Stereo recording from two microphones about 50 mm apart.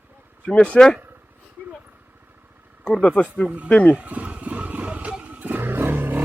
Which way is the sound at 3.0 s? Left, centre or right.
Left.